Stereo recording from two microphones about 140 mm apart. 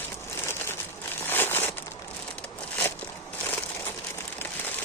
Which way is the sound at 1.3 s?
15° left (ahead or behind).